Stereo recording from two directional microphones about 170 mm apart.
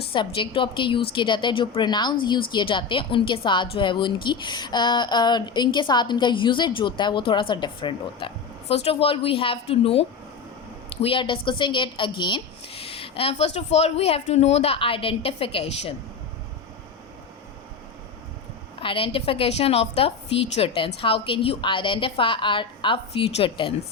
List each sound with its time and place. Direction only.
0.1 s a woman's voice: 30° left (ahead or behind)
18.8 s a woman's voice: 30° left (ahead or behind)